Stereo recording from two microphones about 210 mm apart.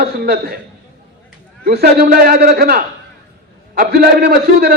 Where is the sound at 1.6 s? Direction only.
50° right (ahead or behind).